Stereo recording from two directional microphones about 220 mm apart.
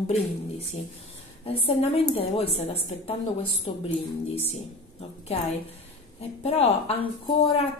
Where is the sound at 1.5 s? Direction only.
25° left (ahead or behind).